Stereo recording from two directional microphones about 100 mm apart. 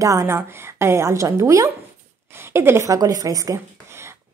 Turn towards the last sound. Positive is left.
turn(degrees=-30)  # may be behind; listen again after turning